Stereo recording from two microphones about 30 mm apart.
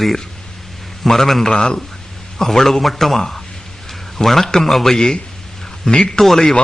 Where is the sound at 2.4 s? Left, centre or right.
Centre.